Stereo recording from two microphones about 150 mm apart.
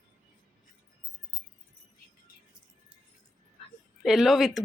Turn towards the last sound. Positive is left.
turn(degrees=0)  # may be behind; listen again after turning